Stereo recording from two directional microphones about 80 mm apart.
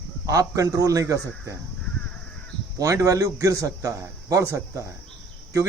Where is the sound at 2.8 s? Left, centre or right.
Right.